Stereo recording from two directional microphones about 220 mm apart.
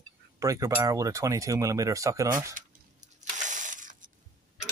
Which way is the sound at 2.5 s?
35° right (ahead or behind).